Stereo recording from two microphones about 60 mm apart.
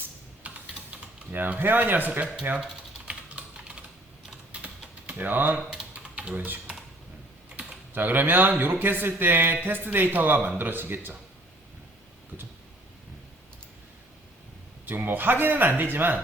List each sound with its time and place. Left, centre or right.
0.4 s typing: right
1.3 s speech: right
3.1 s typing: centre
5.9 s typing: centre
7.5 s speech: right
14.8 s speech: right